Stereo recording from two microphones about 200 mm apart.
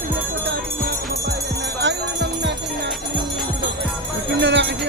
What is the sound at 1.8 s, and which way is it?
Music, 60° right (ahead or behind).